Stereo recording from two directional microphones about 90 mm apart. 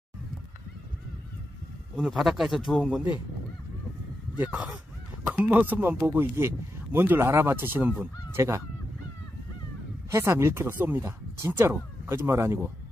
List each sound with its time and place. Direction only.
2.0 s a man's voice: 5° right (ahead or behind)
4.4 s speech: 15° right (ahead or behind)
10.1 s speech: 30° right (ahead or behind)